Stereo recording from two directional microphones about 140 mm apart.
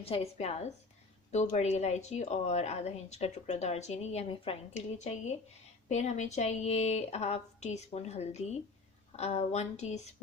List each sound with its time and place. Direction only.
0.0 s a woman's voice: 45° left (ahead or behind)